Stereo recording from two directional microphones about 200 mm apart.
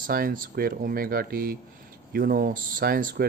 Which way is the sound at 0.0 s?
45° right (ahead or behind).